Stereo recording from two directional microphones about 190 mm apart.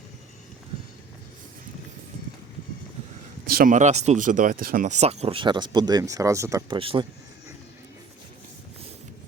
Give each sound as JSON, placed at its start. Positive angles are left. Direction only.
{"t": 3.4, "sound": "speech", "side_deg": -50}
{"t": 6.7, "sound": "speech", "side_deg": -25}